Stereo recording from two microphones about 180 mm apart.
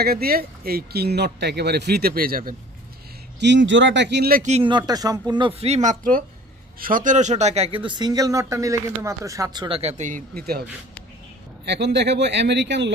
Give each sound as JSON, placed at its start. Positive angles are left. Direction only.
{"t": 0.0, "sound": "speech", "side_deg": -55}
{"t": 3.3, "sound": "speech", "side_deg": -80}
{"t": 4.4, "sound": "speech", "side_deg": -35}
{"t": 9.8, "sound": "speech", "side_deg": -40}
{"t": 11.6, "sound": "speech", "side_deg": -70}